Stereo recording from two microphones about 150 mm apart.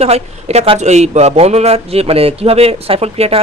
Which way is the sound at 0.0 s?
45° right (ahead or behind).